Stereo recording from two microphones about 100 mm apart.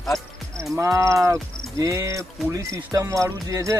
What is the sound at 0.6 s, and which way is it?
Speech, 30° right (ahead or behind).